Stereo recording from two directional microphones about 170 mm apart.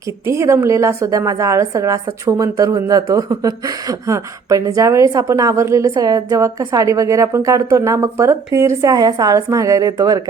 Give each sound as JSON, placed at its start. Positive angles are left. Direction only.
{"t": 0.3, "sound": "a woman's voice", "side_deg": -15}